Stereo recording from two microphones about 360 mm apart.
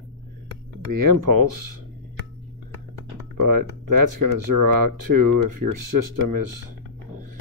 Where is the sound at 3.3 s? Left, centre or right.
Right.